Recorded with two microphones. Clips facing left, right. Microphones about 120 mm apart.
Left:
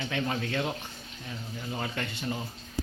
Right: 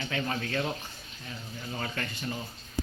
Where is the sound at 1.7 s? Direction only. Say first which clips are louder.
Left 1 dB; 15° left (ahead or behind).